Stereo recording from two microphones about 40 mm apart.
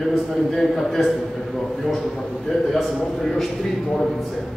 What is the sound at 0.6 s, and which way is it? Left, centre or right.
Speech, centre.